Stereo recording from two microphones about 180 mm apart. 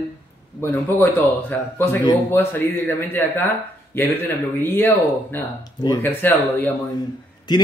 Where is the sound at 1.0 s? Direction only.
10° left (ahead or behind).